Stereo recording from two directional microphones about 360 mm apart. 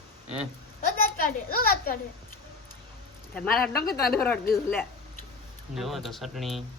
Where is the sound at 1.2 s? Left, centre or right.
Left.